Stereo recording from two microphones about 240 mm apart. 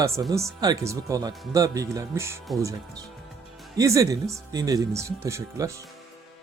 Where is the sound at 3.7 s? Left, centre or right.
Centre.